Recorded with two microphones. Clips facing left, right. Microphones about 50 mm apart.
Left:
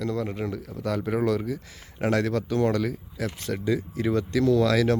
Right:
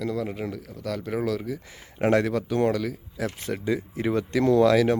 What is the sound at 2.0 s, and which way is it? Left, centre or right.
Speech, right.